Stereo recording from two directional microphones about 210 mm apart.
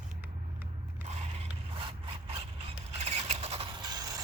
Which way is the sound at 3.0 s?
30° right (ahead or behind).